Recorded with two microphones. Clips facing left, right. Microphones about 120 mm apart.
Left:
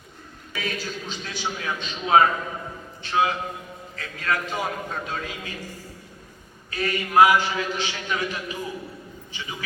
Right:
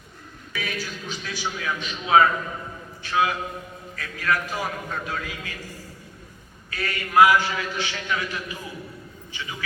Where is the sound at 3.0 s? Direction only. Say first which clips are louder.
Even; 25° left (ahead or behind).